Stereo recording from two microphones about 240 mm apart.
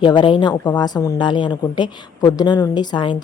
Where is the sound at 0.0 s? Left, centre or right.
Centre.